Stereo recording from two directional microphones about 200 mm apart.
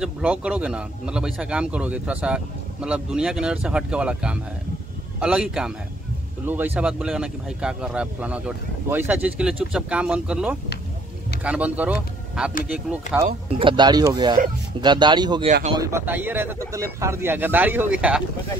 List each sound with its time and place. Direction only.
0.0 s speech: 5° right (ahead or behind)
13.5 s speech: 25° right (ahead or behind); by 18.2 s 5° right (ahead or behind)